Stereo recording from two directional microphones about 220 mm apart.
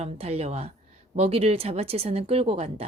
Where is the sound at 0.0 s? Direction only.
30° right (ahead or behind).